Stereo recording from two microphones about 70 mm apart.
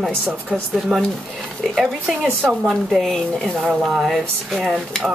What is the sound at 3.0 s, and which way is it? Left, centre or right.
Speech, centre.